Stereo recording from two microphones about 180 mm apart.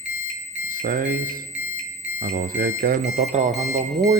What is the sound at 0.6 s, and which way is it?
Alarm, 50° right (ahead or behind).